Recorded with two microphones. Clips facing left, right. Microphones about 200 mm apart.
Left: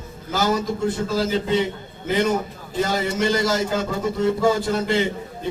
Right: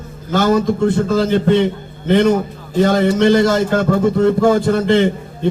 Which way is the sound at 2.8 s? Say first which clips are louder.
Right 10 dB; 55° right (ahead or behind).